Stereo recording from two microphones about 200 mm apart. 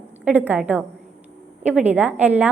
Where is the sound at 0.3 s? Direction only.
10° right (ahead or behind).